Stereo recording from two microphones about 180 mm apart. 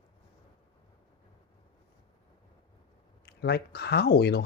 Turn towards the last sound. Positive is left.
turn(degrees=65)  # may be behind; listen again after turning